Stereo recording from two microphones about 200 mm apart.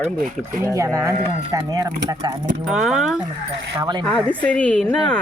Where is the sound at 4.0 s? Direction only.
Centre (ahead or behind).